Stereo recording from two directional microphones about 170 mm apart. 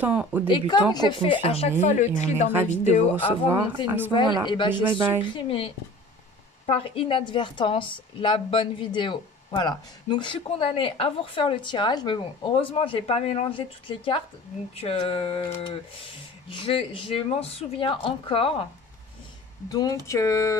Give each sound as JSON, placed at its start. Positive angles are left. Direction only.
{"t": 0.0, "sound": "speech", "side_deg": -10}
{"t": 0.5, "sound": "a woman's voice", "side_deg": 25}
{"t": 3.5, "sound": "speech", "side_deg": -10}
{"t": 4.1, "sound": "a woman's voice", "side_deg": 25}
{"t": 19.7, "sound": "a woman's voice", "side_deg": 20}